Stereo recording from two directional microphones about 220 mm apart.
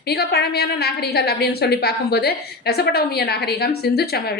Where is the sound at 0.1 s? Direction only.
45° left (ahead or behind).